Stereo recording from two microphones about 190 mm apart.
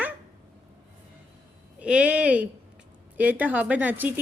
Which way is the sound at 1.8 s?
5° right (ahead or behind).